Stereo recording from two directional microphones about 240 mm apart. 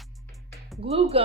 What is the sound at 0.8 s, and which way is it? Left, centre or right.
Speech, right.